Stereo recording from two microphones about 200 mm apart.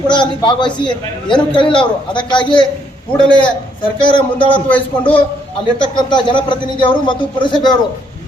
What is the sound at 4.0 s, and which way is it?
Speech, 25° left (ahead or behind).